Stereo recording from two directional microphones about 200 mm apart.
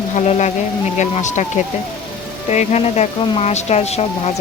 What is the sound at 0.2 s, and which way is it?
Speech, 35° left (ahead or behind).